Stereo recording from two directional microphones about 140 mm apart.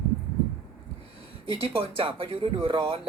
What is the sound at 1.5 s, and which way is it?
Speech, 40° right (ahead or behind).